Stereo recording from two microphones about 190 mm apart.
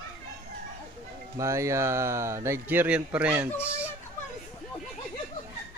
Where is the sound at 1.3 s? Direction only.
15° right (ahead or behind).